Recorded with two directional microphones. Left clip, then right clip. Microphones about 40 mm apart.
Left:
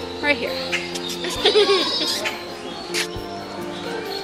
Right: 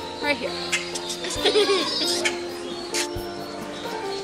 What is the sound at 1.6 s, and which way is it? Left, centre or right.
Speech, left.